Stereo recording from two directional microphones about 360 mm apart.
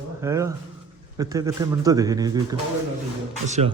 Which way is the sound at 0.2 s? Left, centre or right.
Centre.